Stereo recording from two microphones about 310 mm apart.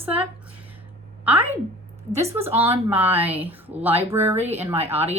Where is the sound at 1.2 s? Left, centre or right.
Centre.